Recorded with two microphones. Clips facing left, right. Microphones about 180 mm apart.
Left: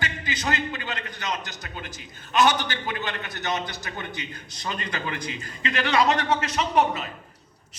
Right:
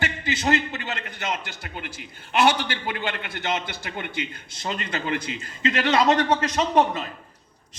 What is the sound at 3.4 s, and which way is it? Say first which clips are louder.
A man's voice: even; 25° right (ahead or behind).